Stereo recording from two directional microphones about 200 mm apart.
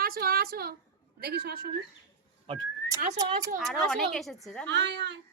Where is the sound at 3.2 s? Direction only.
15° right (ahead or behind).